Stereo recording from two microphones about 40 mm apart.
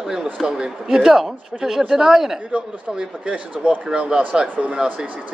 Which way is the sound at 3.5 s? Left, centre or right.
Right.